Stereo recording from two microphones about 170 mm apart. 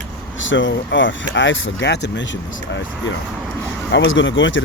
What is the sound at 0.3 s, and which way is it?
Speech, 90° left.